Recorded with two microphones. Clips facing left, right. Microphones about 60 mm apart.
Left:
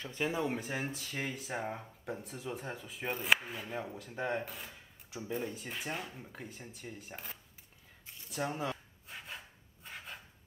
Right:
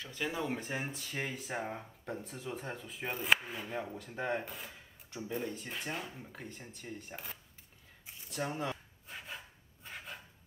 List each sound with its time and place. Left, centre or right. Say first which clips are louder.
0.0 s speech: left 3 dB; left
0.3 s speech: even; centre
8.3 s a sound: left 1 dB; centre